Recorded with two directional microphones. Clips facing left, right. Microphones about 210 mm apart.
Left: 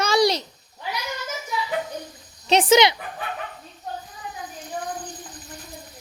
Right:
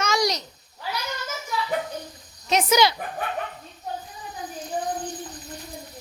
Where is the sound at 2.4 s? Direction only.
30° left (ahead or behind).